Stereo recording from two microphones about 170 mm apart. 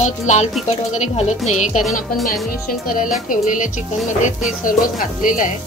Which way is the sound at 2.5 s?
55° left (ahead or behind).